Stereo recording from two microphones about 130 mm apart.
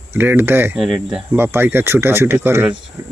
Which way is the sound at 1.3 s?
15° right (ahead or behind).